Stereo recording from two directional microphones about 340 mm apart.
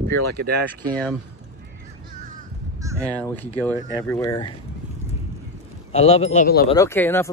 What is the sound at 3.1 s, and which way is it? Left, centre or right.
Speech, centre.